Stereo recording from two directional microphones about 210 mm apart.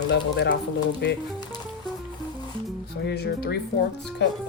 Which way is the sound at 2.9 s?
50° left (ahead or behind).